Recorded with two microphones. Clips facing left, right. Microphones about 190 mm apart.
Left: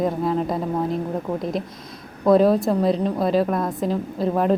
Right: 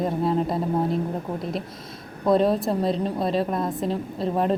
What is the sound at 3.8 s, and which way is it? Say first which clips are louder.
Speech: left 3 dB; centre (ahead or behind).